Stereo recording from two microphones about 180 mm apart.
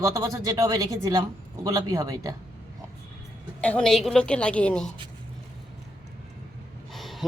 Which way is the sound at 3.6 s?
5° left (ahead or behind).